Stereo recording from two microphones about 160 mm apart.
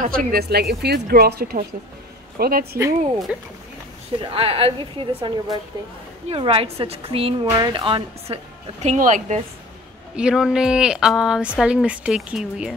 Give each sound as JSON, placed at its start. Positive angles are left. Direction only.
{"t": 0.0, "sound": "a woman's voice", "side_deg": -65}
{"t": 3.3, "sound": "speech", "side_deg": -5}
{"t": 4.2, "sound": "a woman's voice", "side_deg": -35}
{"t": 7.4, "sound": "a woman's voice", "side_deg": -25}
{"t": 8.8, "sound": "speech", "side_deg": -50}
{"t": 10.1, "sound": "a woman's voice", "side_deg": -5}